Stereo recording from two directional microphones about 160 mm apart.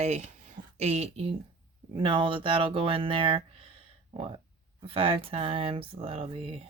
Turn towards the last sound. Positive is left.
turn(degrees=-35)  # may be behind; listen again after turning